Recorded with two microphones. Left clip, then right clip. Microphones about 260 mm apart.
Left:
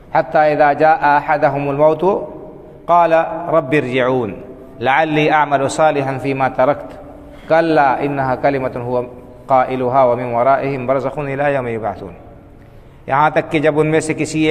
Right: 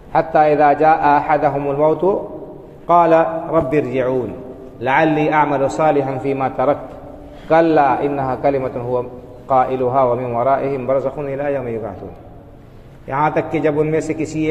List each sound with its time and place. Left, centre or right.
0.1 s a man's voice: left
13.1 s a man's voice: left